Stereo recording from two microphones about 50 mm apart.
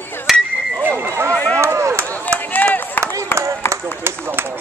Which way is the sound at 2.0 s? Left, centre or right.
Left.